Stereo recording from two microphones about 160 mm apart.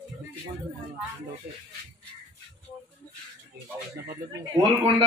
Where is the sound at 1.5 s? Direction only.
70° right (ahead or behind).